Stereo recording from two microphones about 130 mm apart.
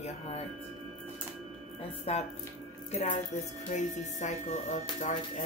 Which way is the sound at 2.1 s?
50° left (ahead or behind).